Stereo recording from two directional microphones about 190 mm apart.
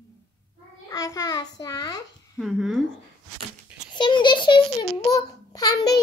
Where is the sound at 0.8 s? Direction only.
15° left (ahead or behind).